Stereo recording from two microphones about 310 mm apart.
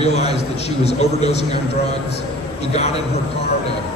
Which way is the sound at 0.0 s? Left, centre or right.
Centre.